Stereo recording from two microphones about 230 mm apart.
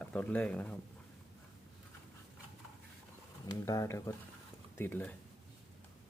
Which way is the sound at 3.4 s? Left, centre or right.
Centre.